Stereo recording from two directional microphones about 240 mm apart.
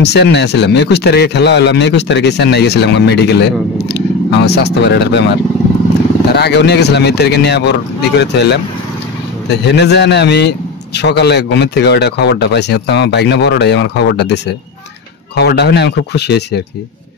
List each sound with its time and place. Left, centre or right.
0.0 s speech: left
9.7 s speech: left